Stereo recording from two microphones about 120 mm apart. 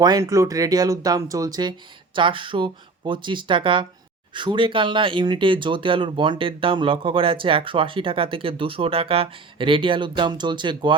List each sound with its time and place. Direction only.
0.0 s speech: 30° right (ahead or behind)
2.1 s speech: 45° right (ahead or behind)